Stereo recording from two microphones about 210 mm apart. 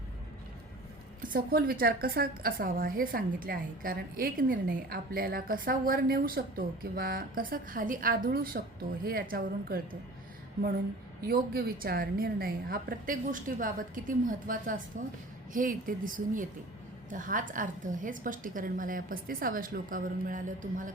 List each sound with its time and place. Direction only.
1.3 s a woman's voice: 45° right (ahead or behind)
11.3 s a woman's voice: 45° right (ahead or behind)